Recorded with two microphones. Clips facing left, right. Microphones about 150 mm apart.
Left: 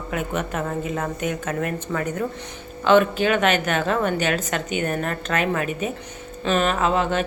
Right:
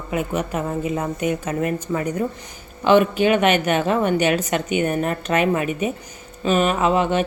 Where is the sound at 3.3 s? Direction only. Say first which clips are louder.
Right 3 dB; 45° left (ahead or behind).